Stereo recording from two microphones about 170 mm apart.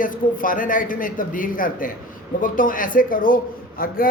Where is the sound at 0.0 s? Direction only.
55° left (ahead or behind).